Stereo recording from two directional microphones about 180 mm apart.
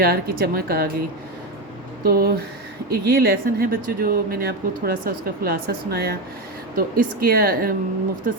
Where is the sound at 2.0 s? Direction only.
55° right (ahead or behind).